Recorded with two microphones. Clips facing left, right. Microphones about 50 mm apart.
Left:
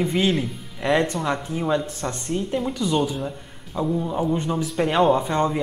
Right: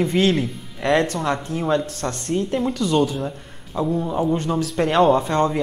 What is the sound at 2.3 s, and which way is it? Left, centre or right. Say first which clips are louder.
Speech: right 4 dB; centre.